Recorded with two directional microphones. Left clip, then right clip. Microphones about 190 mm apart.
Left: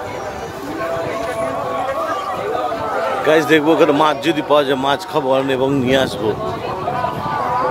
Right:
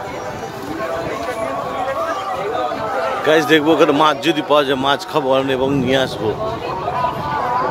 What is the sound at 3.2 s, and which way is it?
A man's voice, 5° right (ahead or behind).